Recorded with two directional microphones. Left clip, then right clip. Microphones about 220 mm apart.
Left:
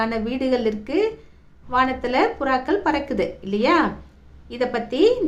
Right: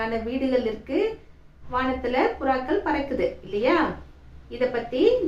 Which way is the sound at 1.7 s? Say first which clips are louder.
Left 5 dB; 50° left (ahead or behind).